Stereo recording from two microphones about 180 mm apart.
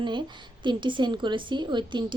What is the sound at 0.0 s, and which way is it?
A woman's voice, 25° right (ahead or behind).